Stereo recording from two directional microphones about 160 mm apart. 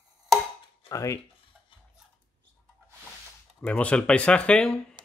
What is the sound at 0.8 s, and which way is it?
Dishes, 20° left (ahead or behind).